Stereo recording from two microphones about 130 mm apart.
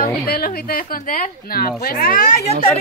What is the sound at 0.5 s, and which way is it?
A woman's voice, 90° left.